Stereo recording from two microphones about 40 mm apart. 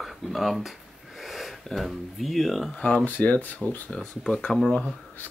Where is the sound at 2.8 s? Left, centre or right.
Left.